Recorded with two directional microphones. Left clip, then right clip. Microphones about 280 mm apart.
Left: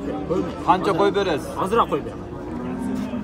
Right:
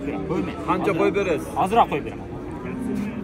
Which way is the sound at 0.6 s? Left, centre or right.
Left.